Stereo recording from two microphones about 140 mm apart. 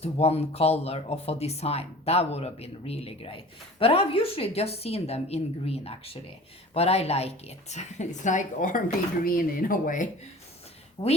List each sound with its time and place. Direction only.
0.0 s speech: 50° left (ahead or behind); by 8.8 s 65° left (ahead or behind)
9.2 s speech: 90° left; by 10.1 s 75° left (ahead or behind)
11.0 s a woman's voice: 40° left (ahead or behind)